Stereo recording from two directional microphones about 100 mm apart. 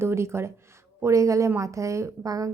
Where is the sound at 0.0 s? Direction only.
25° right (ahead or behind).